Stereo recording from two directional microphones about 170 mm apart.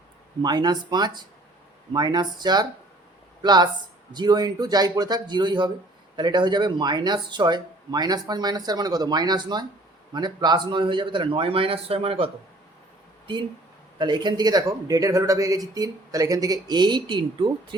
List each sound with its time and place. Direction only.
0.4 s speech: 25° right (ahead or behind)
14.0 s speech: 25° right (ahead or behind)